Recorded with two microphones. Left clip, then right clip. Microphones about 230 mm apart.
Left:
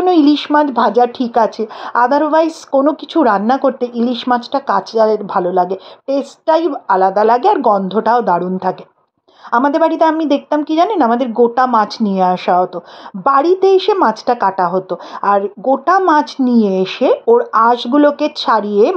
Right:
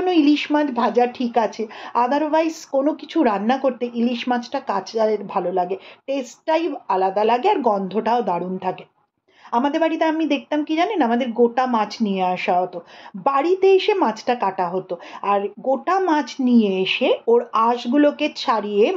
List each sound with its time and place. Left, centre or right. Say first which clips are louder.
0.0 s a woman's voice: left 6 dB; left